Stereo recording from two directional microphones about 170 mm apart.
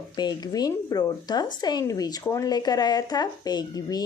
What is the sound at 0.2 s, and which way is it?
Speech, 25° left (ahead or behind).